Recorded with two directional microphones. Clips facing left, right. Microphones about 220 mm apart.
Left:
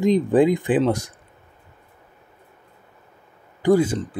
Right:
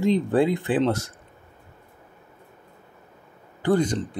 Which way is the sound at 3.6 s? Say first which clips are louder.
Left 4 dB; 10° left (ahead or behind).